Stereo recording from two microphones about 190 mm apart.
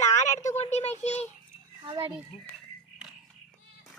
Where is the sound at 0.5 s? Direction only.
35° left (ahead or behind).